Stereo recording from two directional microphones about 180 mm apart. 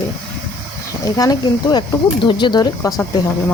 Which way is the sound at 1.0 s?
20° left (ahead or behind).